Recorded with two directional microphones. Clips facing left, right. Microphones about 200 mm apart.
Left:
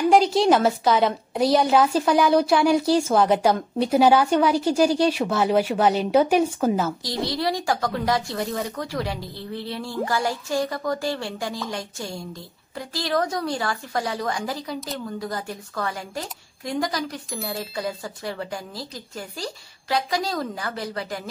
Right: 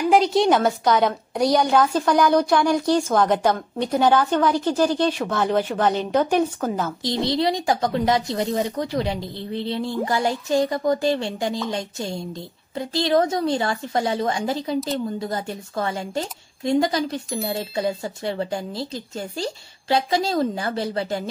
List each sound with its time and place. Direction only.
0.1 s a woman's voice: centre (ahead or behind)
7.0 s speech: 25° right (ahead or behind)